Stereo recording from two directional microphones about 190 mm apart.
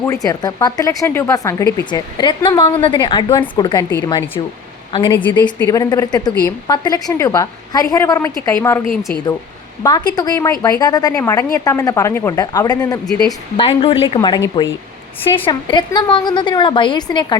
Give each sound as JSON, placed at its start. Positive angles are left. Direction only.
{"t": 0.0, "sound": "a woman's voice", "side_deg": 15}
{"t": 4.9, "sound": "a woman's voice", "side_deg": 25}
{"t": 9.8, "sound": "a woman's voice", "side_deg": 20}